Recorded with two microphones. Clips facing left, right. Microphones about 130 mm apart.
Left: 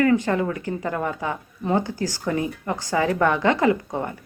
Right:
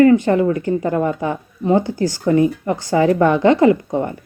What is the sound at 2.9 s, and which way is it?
A woman's voice, 30° right (ahead or behind).